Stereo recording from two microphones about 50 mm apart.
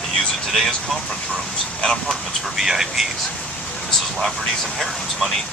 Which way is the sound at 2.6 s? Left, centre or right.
Centre.